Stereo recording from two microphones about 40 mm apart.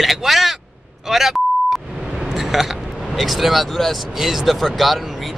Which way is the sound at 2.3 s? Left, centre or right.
Centre.